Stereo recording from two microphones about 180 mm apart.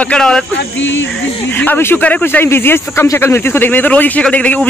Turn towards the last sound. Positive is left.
turn(degrees=10)  # may be behind; listen again after turning